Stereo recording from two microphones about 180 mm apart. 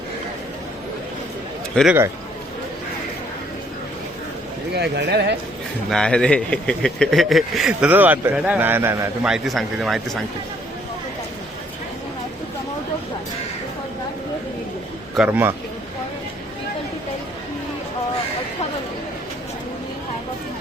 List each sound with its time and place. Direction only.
1.7 s a man's voice: centre (ahead or behind)
4.7 s speech: 70° right (ahead or behind)
5.9 s speech: 5° left (ahead or behind); by 9.0 s 15° right (ahead or behind)
9.2 s speech: centre (ahead or behind)
15.1 s a man's voice: 10° right (ahead or behind)